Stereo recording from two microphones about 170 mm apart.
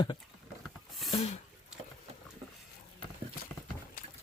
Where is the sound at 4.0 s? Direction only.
60° left (ahead or behind).